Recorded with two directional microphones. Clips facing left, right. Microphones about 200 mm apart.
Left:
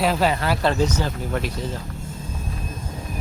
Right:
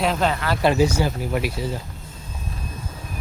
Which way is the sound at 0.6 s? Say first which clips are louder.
Right 6 dB; 10° right (ahead or behind).